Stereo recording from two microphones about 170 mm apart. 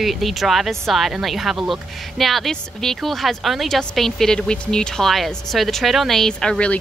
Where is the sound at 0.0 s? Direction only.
Centre (ahead or behind).